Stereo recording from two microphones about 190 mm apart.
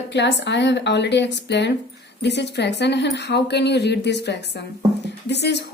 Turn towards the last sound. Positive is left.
turn(degrees=65)  # may be behind; listen again after turning